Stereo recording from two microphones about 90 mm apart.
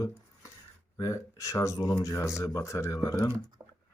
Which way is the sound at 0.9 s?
40° left (ahead or behind).